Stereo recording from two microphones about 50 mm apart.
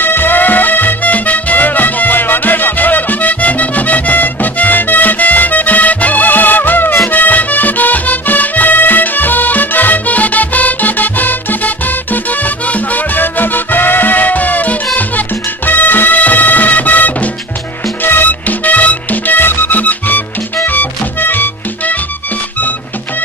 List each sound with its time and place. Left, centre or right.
0.0 s music: left